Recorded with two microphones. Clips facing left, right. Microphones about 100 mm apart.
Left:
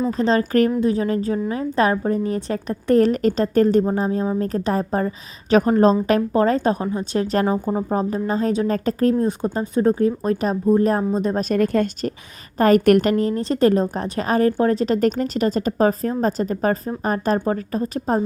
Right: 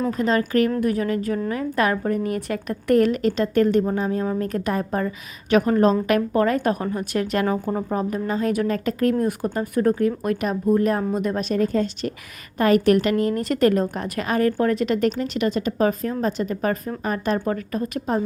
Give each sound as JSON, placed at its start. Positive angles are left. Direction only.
{"t": 0.1, "sound": "a woman's voice", "side_deg": 30}
{"t": 7.4, "sound": "speech", "side_deg": 20}
{"t": 7.9, "sound": "a woman's voice", "side_deg": 30}
{"t": 11.4, "sound": "speech", "side_deg": 60}
{"t": 12.5, "sound": "a woman's voice", "side_deg": 40}
{"t": 12.8, "sound": "speech", "side_deg": 55}
{"t": 13.1, "sound": "a woman's voice", "side_deg": 35}